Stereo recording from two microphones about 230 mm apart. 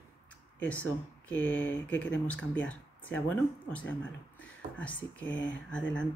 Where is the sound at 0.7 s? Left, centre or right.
Centre.